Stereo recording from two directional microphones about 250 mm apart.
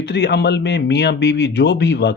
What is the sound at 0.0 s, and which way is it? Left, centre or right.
Speech, left.